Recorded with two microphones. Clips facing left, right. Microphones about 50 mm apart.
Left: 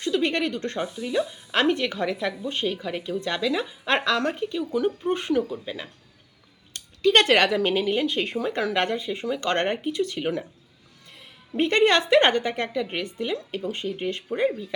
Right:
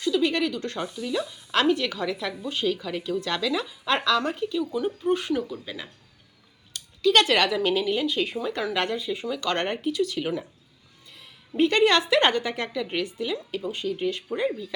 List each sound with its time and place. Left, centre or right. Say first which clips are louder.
0.0 s speech: even; left
0.8 s a woman's voice: left 4 dB; left
1.6 s speech: left 1 dB; left
2.8 s a woman's voice: even; left
5.6 s a woman's voice: left 3 dB; left
6.7 s speech: left 1 dB; left
11.5 s a woman's voice: even; left